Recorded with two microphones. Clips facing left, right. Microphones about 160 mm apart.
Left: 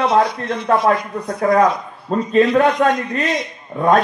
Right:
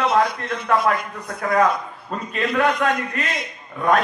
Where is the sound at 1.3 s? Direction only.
40° left (ahead or behind).